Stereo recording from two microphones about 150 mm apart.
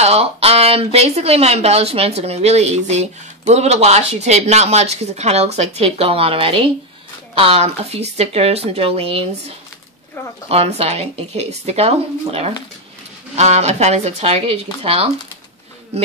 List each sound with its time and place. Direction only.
0.0 s speech: 40° right (ahead or behind)